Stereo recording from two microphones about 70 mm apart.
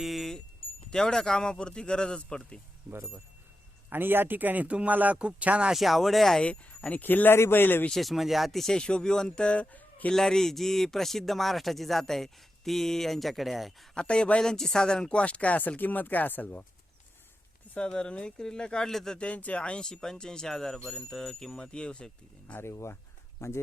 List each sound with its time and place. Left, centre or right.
0.0 s a sound: centre
0.9 s speech: centre
2.9 s speech: right
5.7 s speech: centre
6.4 s a man's voice: centre
7.9 s speech: centre; by 10.1 s left
10.1 s speech: centre
13.9 s speech: centre
17.7 s speech: centre
22.5 s speech: left